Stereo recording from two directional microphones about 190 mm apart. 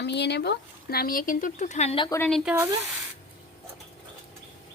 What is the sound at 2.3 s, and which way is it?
Speech, 5° right (ahead or behind).